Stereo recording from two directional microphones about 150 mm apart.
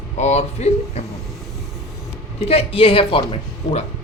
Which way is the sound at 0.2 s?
50° left (ahead or behind).